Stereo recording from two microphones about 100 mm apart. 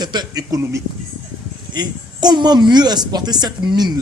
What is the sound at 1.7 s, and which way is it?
A woman's voice, 45° right (ahead or behind).